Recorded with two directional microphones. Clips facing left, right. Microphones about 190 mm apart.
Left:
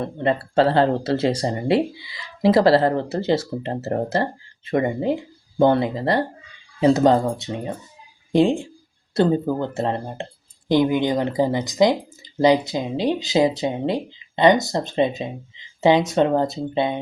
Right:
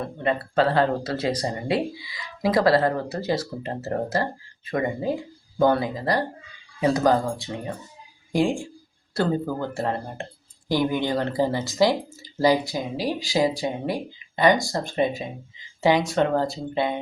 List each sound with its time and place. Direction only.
0.0 s speech: 30° left (ahead or behind)